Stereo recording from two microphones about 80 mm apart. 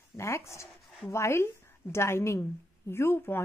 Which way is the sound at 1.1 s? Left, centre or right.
Left.